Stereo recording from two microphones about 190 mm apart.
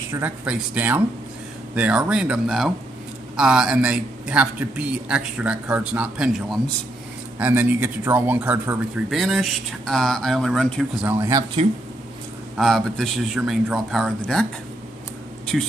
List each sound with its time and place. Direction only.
0.1 s speech: 10° right (ahead or behind)
11.1 s speech: 15° right (ahead or behind)
12.5 s speech: centre (ahead or behind)
15.5 s speech: centre (ahead or behind)